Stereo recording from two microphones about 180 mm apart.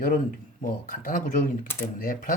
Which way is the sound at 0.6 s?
50° left (ahead or behind).